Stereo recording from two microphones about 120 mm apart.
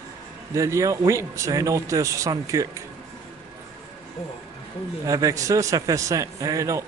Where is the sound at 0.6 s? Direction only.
25° right (ahead or behind).